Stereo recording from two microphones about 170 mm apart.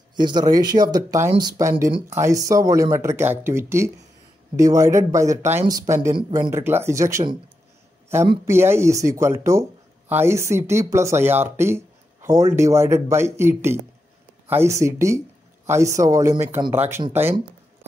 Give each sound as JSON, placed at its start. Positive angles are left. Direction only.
{"t": 0.1, "sound": "speech", "side_deg": -25}
{"t": 6.1, "sound": "speech", "side_deg": -30}
{"t": 6.5, "sound": "speech", "side_deg": -15}
{"t": 8.5, "sound": "speech", "side_deg": -15}